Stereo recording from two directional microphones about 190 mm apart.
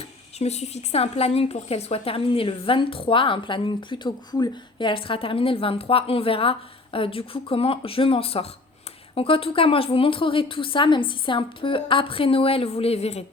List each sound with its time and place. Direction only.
0.3 s a woman's voice: 35° left (ahead or behind)